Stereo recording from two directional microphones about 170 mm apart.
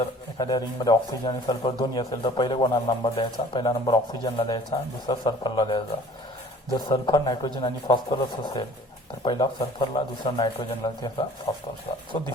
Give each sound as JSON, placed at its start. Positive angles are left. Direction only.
{"t": 0.3, "sound": "a man's voice", "side_deg": 25}